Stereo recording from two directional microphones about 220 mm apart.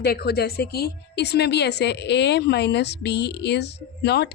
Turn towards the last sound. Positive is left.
turn(degrees=50)  # may be behind; listen again after turning